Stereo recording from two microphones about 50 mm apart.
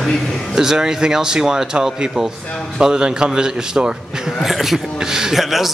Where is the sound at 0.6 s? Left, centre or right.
Centre.